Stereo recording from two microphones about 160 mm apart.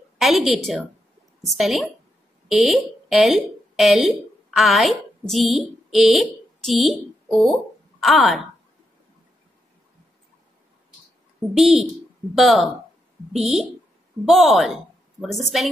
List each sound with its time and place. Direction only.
0.2 s a woman's voice: centre (ahead or behind)
11.5 s speech: centre (ahead or behind)